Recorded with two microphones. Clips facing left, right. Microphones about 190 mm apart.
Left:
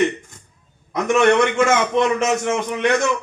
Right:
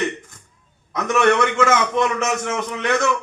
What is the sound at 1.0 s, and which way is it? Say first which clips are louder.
A man's voice: left 2 dB; 25° left (ahead or behind).